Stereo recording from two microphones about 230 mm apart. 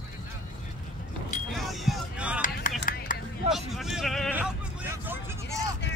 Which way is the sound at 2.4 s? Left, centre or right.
Left.